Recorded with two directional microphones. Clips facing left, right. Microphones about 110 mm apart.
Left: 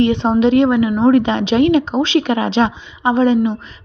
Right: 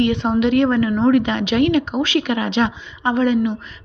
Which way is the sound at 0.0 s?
30° left (ahead or behind).